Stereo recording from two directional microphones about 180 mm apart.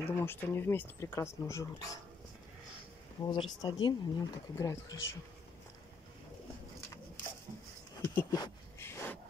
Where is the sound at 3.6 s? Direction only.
20° left (ahead or behind).